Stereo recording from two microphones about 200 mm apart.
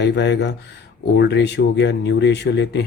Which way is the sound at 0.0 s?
60° left (ahead or behind).